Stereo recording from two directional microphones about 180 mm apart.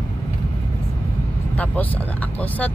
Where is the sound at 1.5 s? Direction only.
10° left (ahead or behind).